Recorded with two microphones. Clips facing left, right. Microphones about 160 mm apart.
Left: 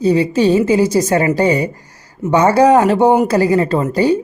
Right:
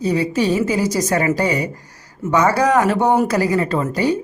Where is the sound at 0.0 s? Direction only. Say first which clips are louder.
Left 5 dB; 30° left (ahead or behind).